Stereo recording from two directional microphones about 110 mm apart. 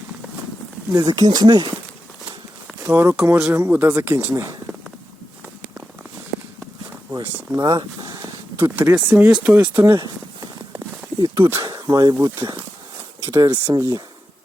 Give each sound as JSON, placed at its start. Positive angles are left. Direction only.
{"t": 0.9, "sound": "speech", "side_deg": -35}
{"t": 2.8, "sound": "speech", "side_deg": -20}
{"t": 7.1, "sound": "speech", "side_deg": -20}
{"t": 7.6, "sound": "speech", "side_deg": -35}
{"t": 9.7, "sound": "speech", "side_deg": -25}
{"t": 10.8, "sound": "walk", "side_deg": -30}
{"t": 11.7, "sound": "speech", "side_deg": -35}